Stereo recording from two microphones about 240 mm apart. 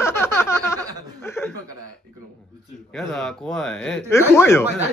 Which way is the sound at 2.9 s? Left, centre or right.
Centre.